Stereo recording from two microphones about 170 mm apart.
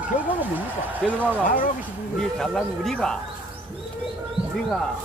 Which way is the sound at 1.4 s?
55° left (ahead or behind).